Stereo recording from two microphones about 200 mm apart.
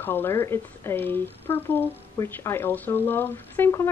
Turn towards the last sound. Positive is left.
turn(degrees=15)  # may be behind; listen again after turning